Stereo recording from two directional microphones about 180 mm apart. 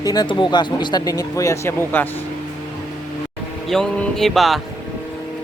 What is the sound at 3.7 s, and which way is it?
Speech, centre (ahead or behind).